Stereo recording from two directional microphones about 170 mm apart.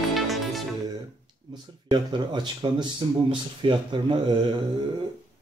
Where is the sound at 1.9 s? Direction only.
25° right (ahead or behind).